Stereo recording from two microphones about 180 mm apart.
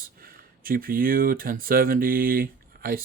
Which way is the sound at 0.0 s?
55° right (ahead or behind).